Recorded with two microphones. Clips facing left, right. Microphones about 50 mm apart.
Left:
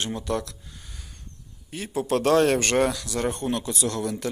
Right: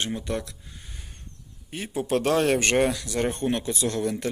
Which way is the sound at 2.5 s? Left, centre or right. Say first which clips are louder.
Even; centre.